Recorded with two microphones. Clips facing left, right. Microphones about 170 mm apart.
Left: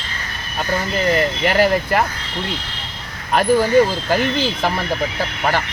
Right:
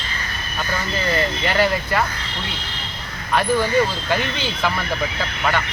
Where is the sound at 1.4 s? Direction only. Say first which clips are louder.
Left 5 dB; 45° left (ahead or behind).